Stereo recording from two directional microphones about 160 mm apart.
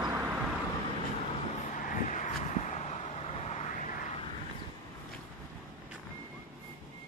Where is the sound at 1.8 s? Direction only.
55° left (ahead or behind).